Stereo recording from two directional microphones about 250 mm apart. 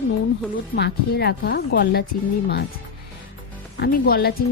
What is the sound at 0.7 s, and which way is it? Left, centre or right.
Speech, left.